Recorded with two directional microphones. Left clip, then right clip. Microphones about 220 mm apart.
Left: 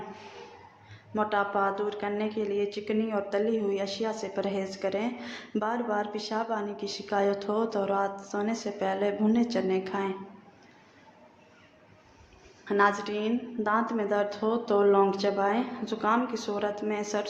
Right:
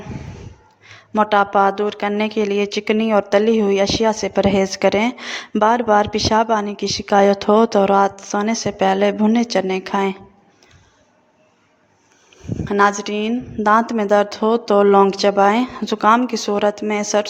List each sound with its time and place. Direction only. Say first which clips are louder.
0.9 s speech: right 13 dB; 45° right (ahead or behind)
12.6 s speech: right 9 dB; 40° right (ahead or behind)